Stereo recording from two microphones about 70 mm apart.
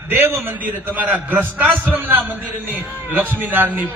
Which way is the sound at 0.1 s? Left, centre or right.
Right.